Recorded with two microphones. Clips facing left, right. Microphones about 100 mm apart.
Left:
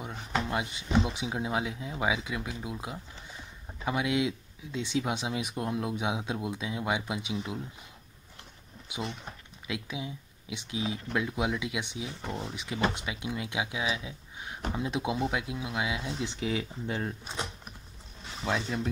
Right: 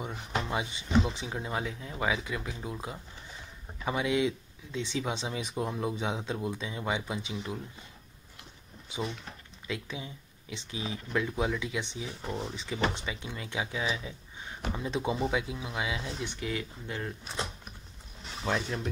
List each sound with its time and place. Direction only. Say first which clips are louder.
0.0 s speech: left 1 dB; centre (ahead or behind)
8.8 s speech: right 1 dB; 10° left (ahead or behind)
12.3 s speech: right 2 dB; centre (ahead or behind)
16.4 s speech: left 5 dB; 15° left (ahead or behind)
18.4 s speech: left 1 dB; 5° right (ahead or behind)